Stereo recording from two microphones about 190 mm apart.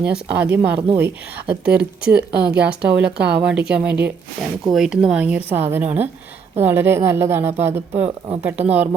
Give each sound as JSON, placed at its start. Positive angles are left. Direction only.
{"t": 0.0, "sound": "a woman's voice", "side_deg": -5}
{"t": 3.2, "sound": "a woman's voice", "side_deg": -60}
{"t": 3.7, "sound": "a woman's voice", "side_deg": -5}